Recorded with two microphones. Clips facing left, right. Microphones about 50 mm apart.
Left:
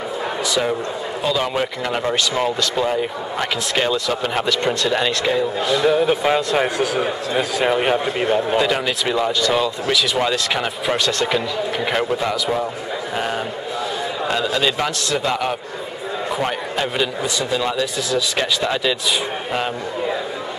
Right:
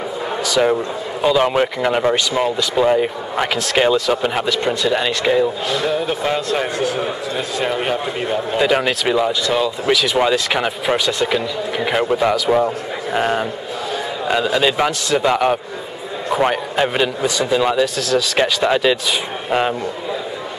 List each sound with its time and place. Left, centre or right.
0.6 s speech: centre
2.9 s speech: centre
5.8 s a man's voice: centre
8.5 s speech: centre
9.1 s speech: centre
9.8 s a man's voice: centre